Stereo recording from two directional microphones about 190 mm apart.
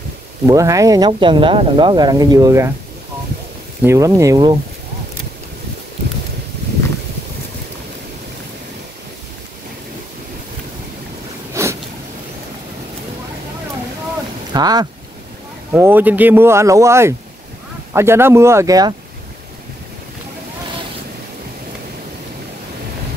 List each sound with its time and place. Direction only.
0.5 s speech: 15° right (ahead or behind)
3.8 s speech: 15° right (ahead or behind)
11.6 s a sound: 15° right (ahead or behind)
14.5 s speech: 20° right (ahead or behind)
15.7 s speech: 10° right (ahead or behind)